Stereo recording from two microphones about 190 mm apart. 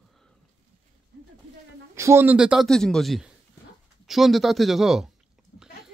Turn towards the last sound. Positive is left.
turn(degrees=0)  # may be behind; listen again after turning